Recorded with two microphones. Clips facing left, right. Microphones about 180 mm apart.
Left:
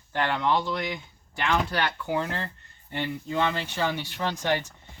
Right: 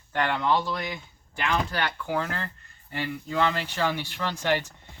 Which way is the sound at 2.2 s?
20° left (ahead or behind).